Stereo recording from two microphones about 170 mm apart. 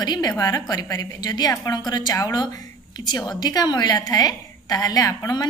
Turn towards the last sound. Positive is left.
turn(degrees=20)  # may be behind; listen again after turning